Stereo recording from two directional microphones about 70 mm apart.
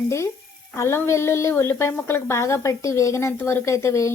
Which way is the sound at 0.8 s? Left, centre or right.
Left.